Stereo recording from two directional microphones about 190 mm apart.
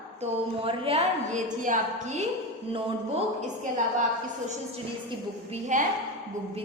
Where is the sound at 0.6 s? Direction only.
30° right (ahead or behind).